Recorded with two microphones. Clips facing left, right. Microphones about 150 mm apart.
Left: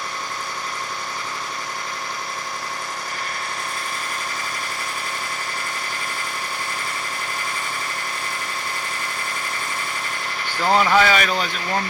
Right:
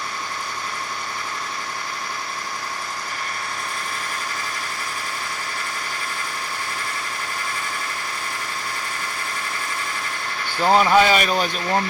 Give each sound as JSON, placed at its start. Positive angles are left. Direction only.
{"t": 10.6, "sound": "speech", "side_deg": -15}